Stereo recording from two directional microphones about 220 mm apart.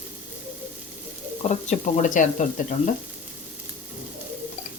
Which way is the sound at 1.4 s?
30° left (ahead or behind).